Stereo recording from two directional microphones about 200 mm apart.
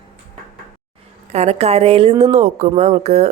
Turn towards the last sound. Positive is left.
turn(degrees=-35)  # may be behind; listen again after turning